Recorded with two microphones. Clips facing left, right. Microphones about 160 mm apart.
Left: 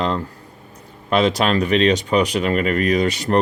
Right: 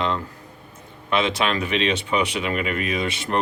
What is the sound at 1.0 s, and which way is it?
Speech, 40° left (ahead or behind).